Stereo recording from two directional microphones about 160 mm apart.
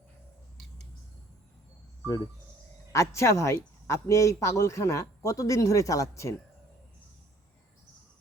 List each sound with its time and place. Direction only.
2.9 s speech: 20° left (ahead or behind)